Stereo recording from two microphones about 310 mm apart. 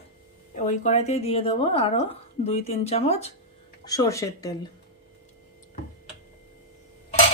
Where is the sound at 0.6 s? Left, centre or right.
Left.